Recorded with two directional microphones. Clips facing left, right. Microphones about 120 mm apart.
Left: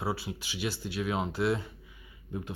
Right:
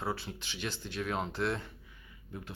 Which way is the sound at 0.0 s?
10° left (ahead or behind).